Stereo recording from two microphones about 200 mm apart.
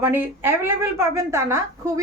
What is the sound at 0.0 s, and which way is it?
A woman's voice, 10° right (ahead or behind).